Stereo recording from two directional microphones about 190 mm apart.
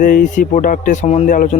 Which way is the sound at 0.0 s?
45° left (ahead or behind).